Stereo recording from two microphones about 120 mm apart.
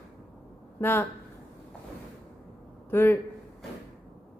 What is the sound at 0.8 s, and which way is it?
Speech, 20° left (ahead or behind).